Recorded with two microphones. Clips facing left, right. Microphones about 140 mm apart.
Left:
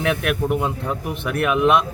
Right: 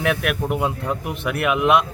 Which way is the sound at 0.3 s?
5° right (ahead or behind).